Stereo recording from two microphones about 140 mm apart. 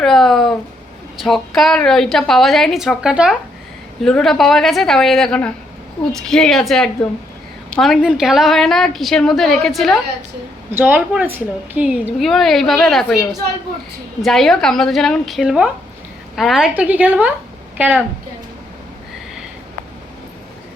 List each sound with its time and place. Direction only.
0.0 s a woman's voice: centre (ahead or behind)
10.7 s a woman's voice: 15° right (ahead or behind); by 13.1 s centre (ahead or behind)
14.2 s a woman's voice: centre (ahead or behind)